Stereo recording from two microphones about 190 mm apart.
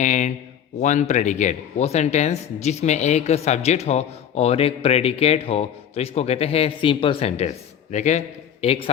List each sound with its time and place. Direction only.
0.0 s speech: 40° left (ahead or behind)